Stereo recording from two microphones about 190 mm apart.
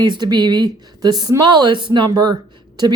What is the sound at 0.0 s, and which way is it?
Speech, 25° right (ahead or behind).